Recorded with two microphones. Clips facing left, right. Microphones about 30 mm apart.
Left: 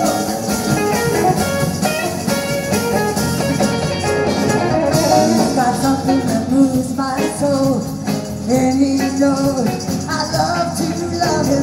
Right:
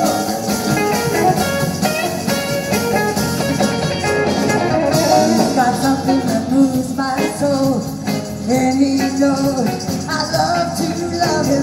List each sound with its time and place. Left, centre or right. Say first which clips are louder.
0.7 s music: even; centre
2.7 s music: right 1 dB; centre
8.5 s music: even; right
10.1 s music: right 1 dB; centre